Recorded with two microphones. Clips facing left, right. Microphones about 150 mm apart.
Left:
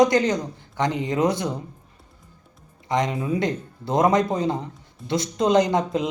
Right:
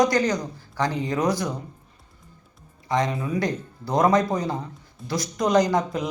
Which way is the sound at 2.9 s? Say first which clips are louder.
Left 1 dB; 20° left (ahead or behind).